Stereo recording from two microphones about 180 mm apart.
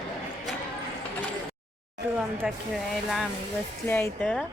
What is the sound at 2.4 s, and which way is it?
Speech, 5° right (ahead or behind).